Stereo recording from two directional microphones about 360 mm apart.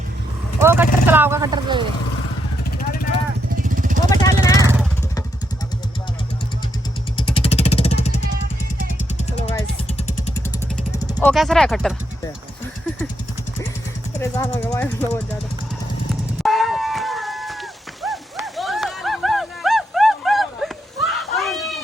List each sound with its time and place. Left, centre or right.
0.6 s speech: centre
3.5 s vehicle: right
4.1 s vehicle: centre
4.5 s vehicle: centre
7.2 s vehicle: centre
11.0 s speech: centre
14.2 s speech: centre
16.4 s a sound: centre